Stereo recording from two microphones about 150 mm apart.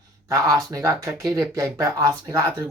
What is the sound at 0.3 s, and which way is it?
Speech, 20° right (ahead or behind).